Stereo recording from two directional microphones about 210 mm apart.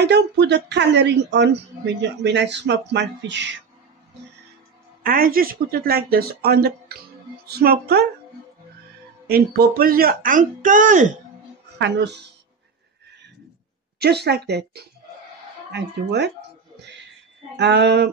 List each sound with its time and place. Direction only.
0.0 s a woman's voice: 55° right (ahead or behind)
5.0 s speech: 45° right (ahead or behind)
9.3 s speech: 45° right (ahead or behind)
11.8 s a woman's voice: 55° right (ahead or behind)
13.9 s speech: 50° right (ahead or behind)
17.6 s a woman's voice: 55° right (ahead or behind)